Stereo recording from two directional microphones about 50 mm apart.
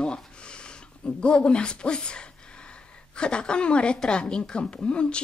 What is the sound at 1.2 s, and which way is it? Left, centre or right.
A child's voice, centre.